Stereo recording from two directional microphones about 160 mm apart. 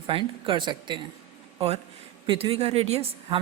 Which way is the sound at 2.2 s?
35° right (ahead or behind).